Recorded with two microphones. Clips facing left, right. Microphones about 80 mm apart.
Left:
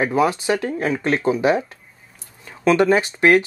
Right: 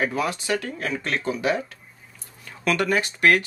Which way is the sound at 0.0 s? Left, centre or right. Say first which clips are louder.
Left 7 dB; left.